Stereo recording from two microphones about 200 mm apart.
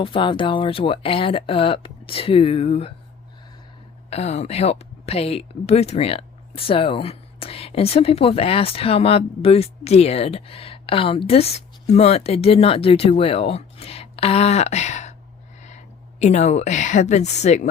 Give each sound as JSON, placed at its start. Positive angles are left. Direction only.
{"t": 0.0, "sound": "speech", "side_deg": 25}
{"t": 4.1, "sound": "speech", "side_deg": 30}
{"t": 16.2, "sound": "a woman's voice", "side_deg": 35}